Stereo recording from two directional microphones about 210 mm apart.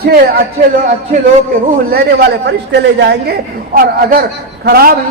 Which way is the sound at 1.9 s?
50° right (ahead or behind).